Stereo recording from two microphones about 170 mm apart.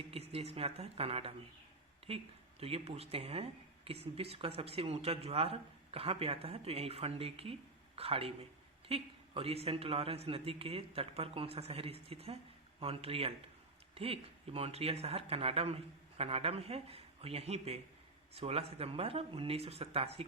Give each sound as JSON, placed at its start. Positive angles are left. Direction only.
{"t": 0.1, "sound": "speech", "side_deg": -35}